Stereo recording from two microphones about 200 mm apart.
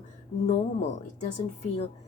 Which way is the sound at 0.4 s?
35° left (ahead or behind).